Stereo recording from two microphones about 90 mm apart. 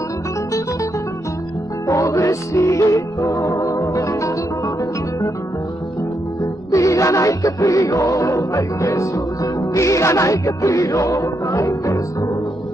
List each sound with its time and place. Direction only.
1.9 s music: 35° left (ahead or behind)
6.7 s music: 35° left (ahead or behind)